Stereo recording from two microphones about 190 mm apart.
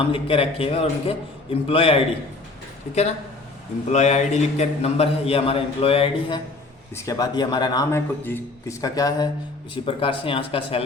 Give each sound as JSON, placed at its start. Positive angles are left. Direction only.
{"t": 0.0, "sound": "a man's voice", "side_deg": 30}
{"t": 6.9, "sound": "a man's voice", "side_deg": 15}